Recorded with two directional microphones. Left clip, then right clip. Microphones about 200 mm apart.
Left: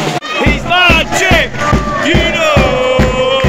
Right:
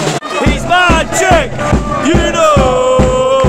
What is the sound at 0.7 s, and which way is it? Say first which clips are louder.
Music: left 1 dB; 15° right (ahead or behind).